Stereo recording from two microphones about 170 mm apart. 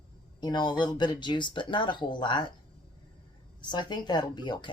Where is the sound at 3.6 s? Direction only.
25° left (ahead or behind).